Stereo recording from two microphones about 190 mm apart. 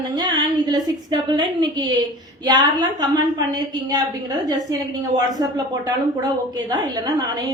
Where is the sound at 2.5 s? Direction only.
20° right (ahead or behind).